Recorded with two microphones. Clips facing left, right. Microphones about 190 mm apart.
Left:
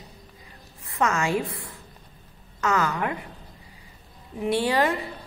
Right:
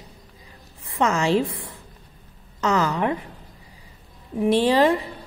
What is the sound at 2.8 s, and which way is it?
Speech, 25° right (ahead or behind).